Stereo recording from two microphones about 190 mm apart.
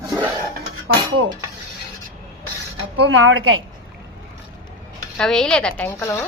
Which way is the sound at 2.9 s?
75° right (ahead or behind).